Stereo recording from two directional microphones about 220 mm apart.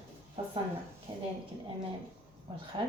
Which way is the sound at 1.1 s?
25° right (ahead or behind).